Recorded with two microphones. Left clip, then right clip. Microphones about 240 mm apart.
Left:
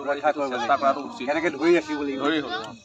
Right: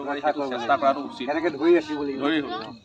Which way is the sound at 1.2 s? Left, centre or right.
Left.